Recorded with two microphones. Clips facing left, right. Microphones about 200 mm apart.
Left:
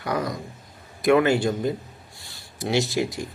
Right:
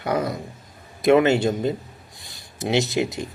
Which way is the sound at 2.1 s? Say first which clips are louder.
Right 1 dB; 15° right (ahead or behind).